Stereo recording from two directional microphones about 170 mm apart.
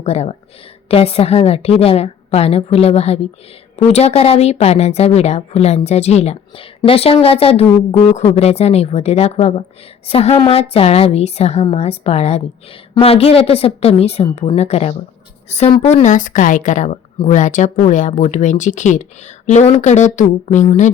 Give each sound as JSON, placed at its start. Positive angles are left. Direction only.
{"t": 0.0, "sound": "a woman's voice", "side_deg": 35}